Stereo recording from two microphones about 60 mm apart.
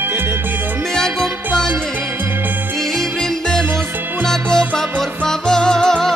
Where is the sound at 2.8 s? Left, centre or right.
Centre.